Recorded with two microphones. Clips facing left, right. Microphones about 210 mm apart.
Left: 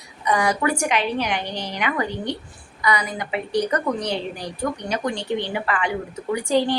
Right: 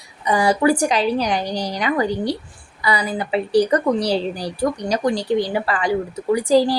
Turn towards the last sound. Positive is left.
turn(degrees=-35)  # may be behind; listen again after turning